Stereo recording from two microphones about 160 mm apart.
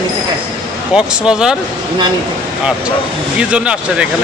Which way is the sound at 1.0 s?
5° right (ahead or behind).